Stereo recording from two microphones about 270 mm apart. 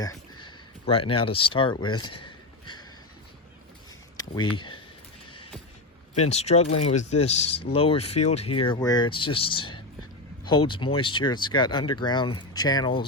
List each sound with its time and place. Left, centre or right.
0.0 s a sound: centre
0.9 s speech: centre
4.5 s speech: centre
6.1 s speech: left